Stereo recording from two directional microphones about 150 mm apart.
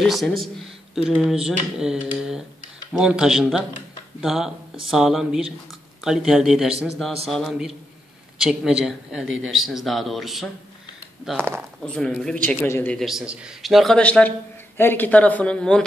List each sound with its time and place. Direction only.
0.0 s speech: centre (ahead or behind)
11.8 s speech: 5° left (ahead or behind)
12.6 s speech: 15° left (ahead or behind)
12.9 s speech: centre (ahead or behind)